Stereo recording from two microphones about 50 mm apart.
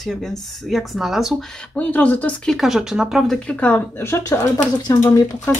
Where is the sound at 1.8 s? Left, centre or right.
Left.